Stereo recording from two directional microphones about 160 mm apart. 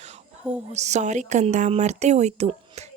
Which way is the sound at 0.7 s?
45° right (ahead or behind).